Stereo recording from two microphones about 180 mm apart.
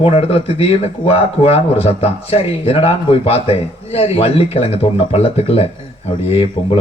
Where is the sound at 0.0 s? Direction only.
35° left (ahead or behind).